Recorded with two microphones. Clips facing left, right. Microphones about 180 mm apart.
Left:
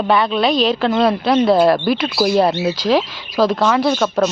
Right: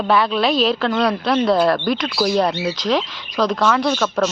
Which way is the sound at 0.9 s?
25° left (ahead or behind).